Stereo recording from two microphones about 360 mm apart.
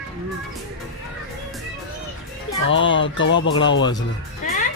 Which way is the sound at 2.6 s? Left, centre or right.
Left.